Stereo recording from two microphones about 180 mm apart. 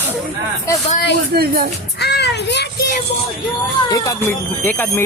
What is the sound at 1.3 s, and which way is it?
Speech, 60° right (ahead or behind).